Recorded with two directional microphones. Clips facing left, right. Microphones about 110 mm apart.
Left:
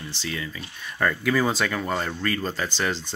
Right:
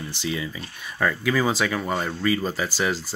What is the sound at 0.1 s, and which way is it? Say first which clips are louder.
Speech: right 4 dB; 15° right (ahead or behind).